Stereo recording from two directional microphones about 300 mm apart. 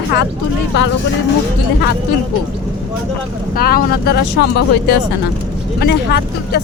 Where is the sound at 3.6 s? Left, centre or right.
Left.